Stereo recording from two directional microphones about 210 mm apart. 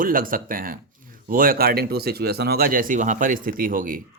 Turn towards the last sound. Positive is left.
turn(degrees=-40)  # may be behind; listen again after turning